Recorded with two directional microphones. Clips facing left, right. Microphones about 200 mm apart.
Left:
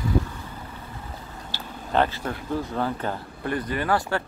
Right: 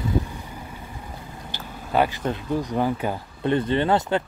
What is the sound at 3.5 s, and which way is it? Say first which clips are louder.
Speech: right 5 dB; 25° right (ahead or behind).